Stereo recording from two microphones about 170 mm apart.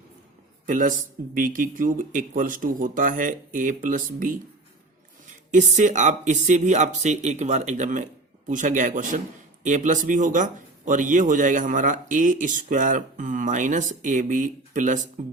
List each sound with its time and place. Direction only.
0.7 s a man's voice: 50° right (ahead or behind)
5.5 s a man's voice: 45° right (ahead or behind)